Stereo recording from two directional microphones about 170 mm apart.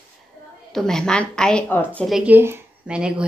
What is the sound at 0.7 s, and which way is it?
A woman's voice, 5° left (ahead or behind).